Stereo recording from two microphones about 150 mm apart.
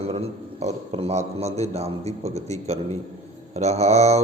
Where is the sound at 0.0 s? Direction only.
45° right (ahead or behind).